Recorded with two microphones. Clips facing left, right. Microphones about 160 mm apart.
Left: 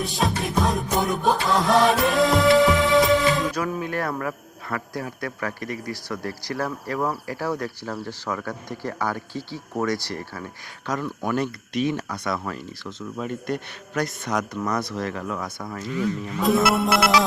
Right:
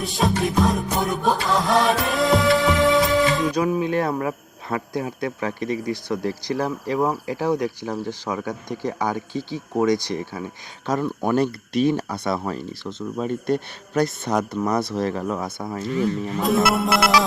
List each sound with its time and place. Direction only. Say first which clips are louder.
0.0 s music: right 3 dB; centre (ahead or behind)
3.5 s speech: right 6 dB; 20° right (ahead or behind)
10.8 s speech: right 4 dB; 30° right (ahead or behind)
16.4 s music: even; centre (ahead or behind)